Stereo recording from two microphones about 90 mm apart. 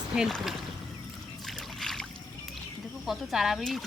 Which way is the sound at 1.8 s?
5° left (ahead or behind).